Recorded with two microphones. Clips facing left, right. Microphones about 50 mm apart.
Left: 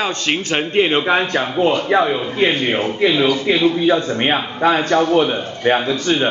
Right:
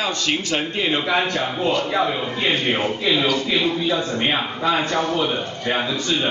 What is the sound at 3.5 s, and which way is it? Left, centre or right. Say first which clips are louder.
Speech: left 5 dB; left.